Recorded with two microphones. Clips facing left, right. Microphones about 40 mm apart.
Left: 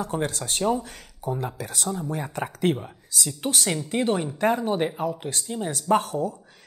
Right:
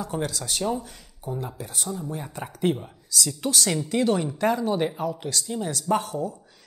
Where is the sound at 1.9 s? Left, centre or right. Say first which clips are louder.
Left 4 dB; left.